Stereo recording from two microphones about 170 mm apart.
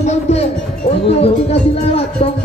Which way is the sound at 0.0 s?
40° left (ahead or behind).